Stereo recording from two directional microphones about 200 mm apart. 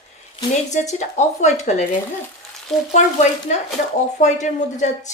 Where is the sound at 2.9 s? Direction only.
35° left (ahead or behind).